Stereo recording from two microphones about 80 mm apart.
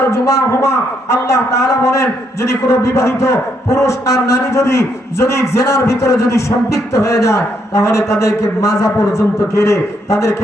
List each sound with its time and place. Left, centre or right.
0.1 s a man's voice: left